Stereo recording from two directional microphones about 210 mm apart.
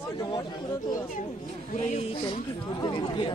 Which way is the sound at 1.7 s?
35° left (ahead or behind).